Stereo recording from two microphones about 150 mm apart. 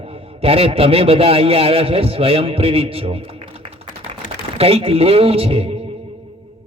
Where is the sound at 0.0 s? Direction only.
40° right (ahead or behind).